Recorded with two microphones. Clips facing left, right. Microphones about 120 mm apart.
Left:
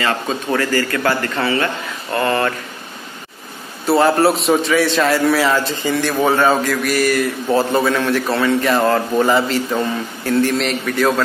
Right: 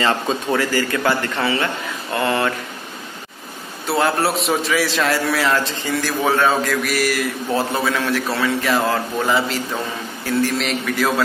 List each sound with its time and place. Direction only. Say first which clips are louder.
0.5 s a man's voice: left 2 dB; 10° right (ahead or behind)
3.8 s a man's voice: left 5 dB; centre (ahead or behind)